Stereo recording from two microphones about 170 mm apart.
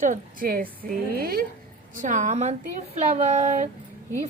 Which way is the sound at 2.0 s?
45° right (ahead or behind).